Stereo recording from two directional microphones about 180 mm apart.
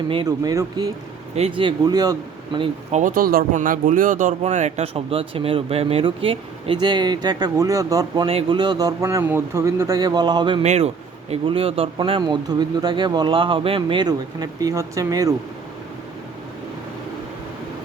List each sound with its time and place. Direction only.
0.1 s speech: 25° right (ahead or behind)
2.9 s speech: 45° right (ahead or behind); by 15.4 s 20° right (ahead or behind)